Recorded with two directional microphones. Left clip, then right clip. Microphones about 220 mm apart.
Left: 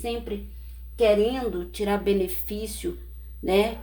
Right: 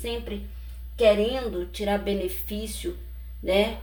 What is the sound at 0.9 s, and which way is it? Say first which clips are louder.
A woman's voice: even; 40° left (ahead or behind).